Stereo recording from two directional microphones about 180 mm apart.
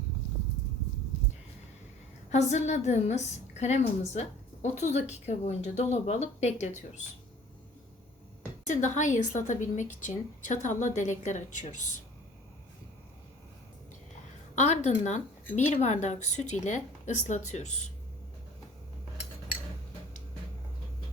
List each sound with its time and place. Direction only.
2.3 s a woman's voice: 40° left (ahead or behind)
8.6 s a woman's voice: 45° left (ahead or behind)
14.5 s a woman's voice: 40° left (ahead or behind)